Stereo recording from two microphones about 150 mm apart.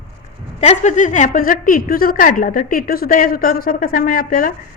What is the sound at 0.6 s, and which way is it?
A woman's voice, 50° left (ahead or behind).